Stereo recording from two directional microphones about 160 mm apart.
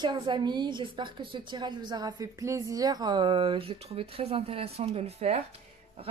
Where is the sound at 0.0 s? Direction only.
30° right (ahead or behind).